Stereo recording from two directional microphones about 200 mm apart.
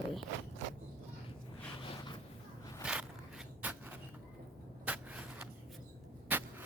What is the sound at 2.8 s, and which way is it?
Walk, 5° right (ahead or behind).